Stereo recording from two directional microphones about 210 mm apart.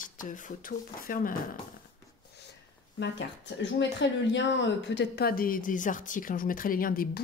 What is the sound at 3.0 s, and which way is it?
Speech, 55° left (ahead or behind).